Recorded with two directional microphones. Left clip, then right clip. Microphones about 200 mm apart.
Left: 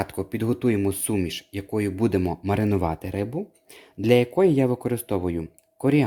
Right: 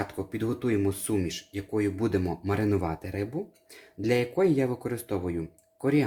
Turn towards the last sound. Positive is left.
turn(degrees=40)  # may be behind; listen again after turning